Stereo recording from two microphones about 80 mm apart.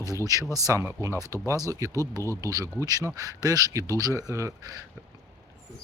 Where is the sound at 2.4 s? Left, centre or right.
Right.